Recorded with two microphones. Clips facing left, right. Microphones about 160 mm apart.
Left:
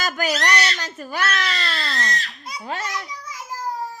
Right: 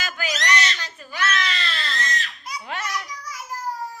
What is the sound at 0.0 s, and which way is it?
Baby cry, 40° left (ahead or behind).